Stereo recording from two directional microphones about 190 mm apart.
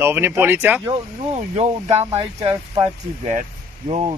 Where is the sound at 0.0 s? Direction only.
10° right (ahead or behind).